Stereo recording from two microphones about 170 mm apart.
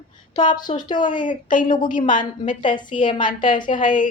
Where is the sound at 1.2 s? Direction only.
50° left (ahead or behind).